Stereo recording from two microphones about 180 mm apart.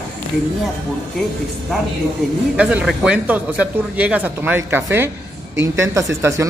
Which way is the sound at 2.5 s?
5° right (ahead or behind).